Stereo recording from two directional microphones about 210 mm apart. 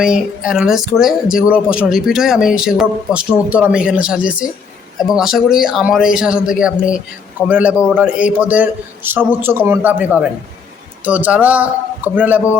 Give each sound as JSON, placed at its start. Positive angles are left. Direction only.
{"t": 0.0, "sound": "a man's voice", "side_deg": -5}